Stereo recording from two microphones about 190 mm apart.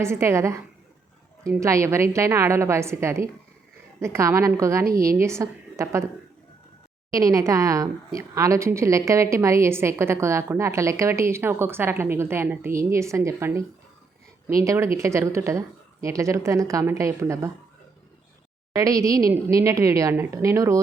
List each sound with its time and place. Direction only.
0.0 s a woman's voice: 15° right (ahead or behind)
7.1 s a woman's voice: 20° right (ahead or behind)
18.7 s a woman's voice: 20° right (ahead or behind)